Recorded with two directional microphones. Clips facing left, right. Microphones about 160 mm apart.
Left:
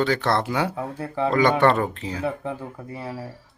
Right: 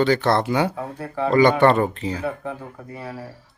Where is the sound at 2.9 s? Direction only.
25° left (ahead or behind).